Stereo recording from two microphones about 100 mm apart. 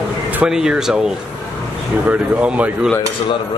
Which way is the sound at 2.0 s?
15° right (ahead or behind).